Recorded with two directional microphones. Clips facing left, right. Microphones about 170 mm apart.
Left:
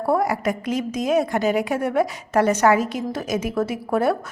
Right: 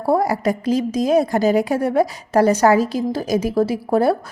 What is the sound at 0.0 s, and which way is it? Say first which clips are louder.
A woman's voice: right 3 dB; 30° right (ahead or behind).